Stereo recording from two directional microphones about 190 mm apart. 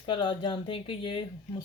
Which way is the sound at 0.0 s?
25° left (ahead or behind).